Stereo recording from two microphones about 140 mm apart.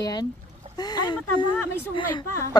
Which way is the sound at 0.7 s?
30° left (ahead or behind).